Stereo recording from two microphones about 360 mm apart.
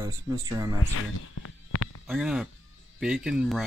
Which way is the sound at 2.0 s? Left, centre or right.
Centre.